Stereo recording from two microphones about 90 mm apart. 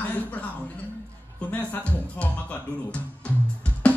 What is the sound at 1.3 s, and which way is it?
Speech, 20° left (ahead or behind).